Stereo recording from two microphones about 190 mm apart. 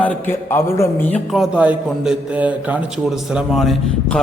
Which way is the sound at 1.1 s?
Centre (ahead or behind).